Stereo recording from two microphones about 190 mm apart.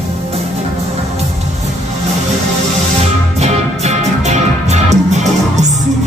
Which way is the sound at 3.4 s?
35° right (ahead or behind).